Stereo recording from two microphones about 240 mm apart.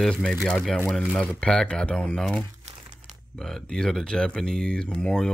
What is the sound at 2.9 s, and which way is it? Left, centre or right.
Speech, centre.